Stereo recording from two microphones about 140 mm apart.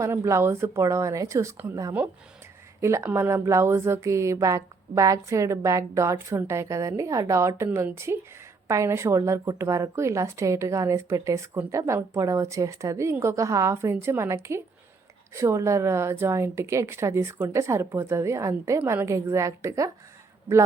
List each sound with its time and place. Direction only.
0.0 s speech: 20° right (ahead or behind)